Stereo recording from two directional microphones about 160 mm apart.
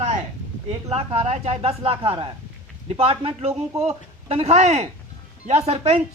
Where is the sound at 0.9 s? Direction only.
40° right (ahead or behind).